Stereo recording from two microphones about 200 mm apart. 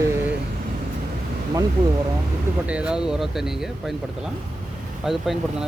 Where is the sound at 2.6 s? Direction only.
5° right (ahead or behind).